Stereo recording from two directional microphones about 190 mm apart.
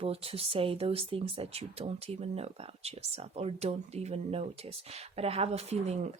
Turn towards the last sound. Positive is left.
turn(degrees=-35)  # may be behind; listen again after turning